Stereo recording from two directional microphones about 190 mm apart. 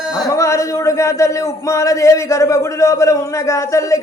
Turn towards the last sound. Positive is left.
turn(degrees=15)  # may be behind; listen again after turning